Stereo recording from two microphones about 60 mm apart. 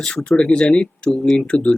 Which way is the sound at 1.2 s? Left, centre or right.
Centre.